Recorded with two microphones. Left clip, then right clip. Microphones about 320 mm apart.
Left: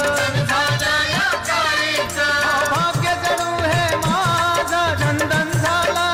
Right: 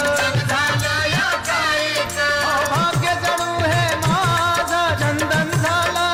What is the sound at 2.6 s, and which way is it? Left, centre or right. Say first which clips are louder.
Music: even; centre.